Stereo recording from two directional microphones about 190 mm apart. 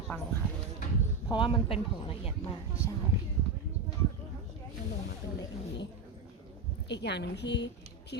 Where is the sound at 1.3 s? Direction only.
25° left (ahead or behind).